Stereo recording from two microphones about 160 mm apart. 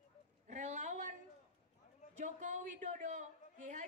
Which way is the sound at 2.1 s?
50° right (ahead or behind).